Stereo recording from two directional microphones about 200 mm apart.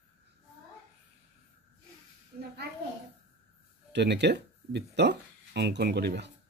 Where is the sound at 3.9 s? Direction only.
60° right (ahead or behind).